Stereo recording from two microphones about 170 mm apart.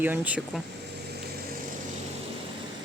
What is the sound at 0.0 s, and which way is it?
Speech, 10° right (ahead or behind).